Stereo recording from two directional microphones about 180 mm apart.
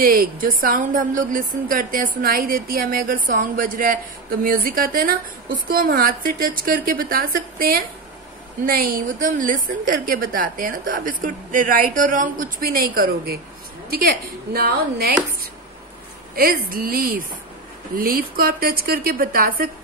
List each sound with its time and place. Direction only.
0.0 s a woman's voice: 50° right (ahead or behind)
16.6 s a woman's voice: 55° right (ahead or behind)